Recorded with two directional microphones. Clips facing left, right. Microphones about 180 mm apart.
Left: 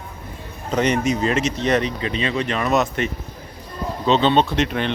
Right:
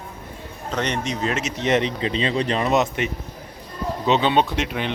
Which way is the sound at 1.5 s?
20° right (ahead or behind).